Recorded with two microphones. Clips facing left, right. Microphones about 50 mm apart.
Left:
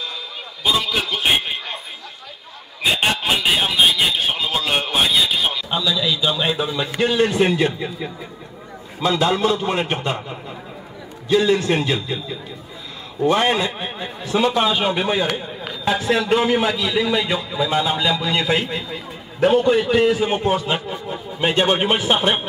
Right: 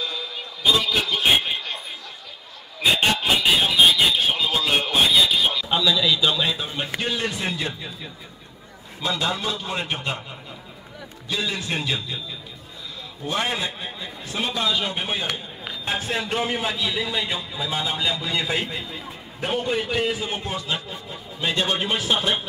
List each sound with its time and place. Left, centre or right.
0.7 s a sound: centre
2.8 s a sound: centre
4.3 s music: centre
6.4 s a man's voice: left
7.0 s a man's voice: left
11.2 s a man's voice: left
15.0 s a man's voice: left
20.3 s speech: left